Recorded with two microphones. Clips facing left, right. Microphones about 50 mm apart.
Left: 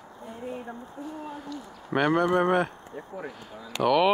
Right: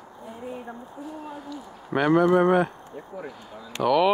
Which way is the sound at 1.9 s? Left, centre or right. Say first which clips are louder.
Right 4 dB; centre.